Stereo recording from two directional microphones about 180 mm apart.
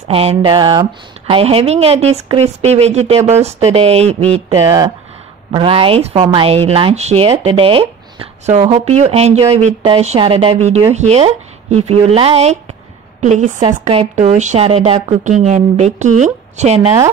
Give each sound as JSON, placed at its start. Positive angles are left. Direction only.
{"t": 0.1, "sound": "speech", "side_deg": -30}
{"t": 4.6, "sound": "speech", "side_deg": -20}
{"t": 13.6, "sound": "a woman's voice", "side_deg": -30}